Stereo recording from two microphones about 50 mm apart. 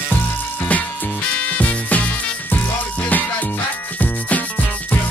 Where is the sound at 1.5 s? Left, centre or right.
Left.